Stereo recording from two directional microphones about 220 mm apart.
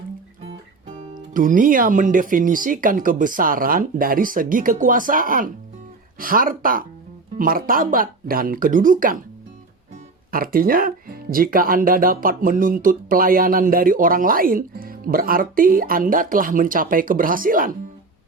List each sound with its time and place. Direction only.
1.3 s speech: 40° right (ahead or behind)
10.3 s speech: 40° right (ahead or behind)